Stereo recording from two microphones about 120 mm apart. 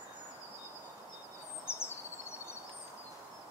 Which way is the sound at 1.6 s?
20° left (ahead or behind).